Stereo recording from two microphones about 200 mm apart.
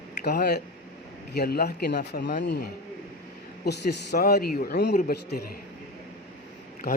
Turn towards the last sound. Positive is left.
turn(degrees=50)  # may be behind; listen again after turning